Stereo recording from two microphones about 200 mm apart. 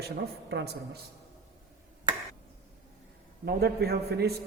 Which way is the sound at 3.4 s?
55° right (ahead or behind).